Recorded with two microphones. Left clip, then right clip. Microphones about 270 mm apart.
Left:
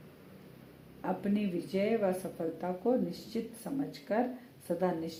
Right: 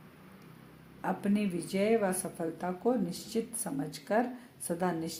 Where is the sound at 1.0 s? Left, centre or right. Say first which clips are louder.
Right 1 dB; right.